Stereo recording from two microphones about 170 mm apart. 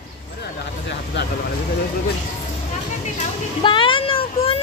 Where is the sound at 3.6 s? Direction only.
30° left (ahead or behind).